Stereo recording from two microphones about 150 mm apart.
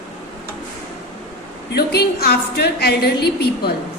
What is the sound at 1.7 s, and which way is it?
A woman's voice, 90° left.